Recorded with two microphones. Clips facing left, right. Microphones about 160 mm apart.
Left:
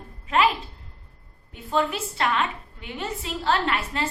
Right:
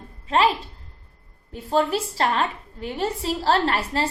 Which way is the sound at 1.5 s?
35° right (ahead or behind).